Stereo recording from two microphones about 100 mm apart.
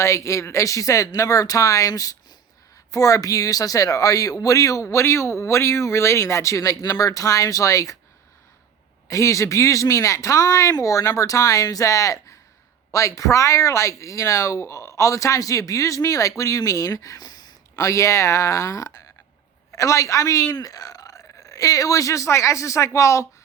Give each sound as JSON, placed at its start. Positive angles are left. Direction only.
{"t": 0.0, "sound": "speech", "side_deg": 30}
{"t": 9.0, "sound": "speech", "side_deg": 30}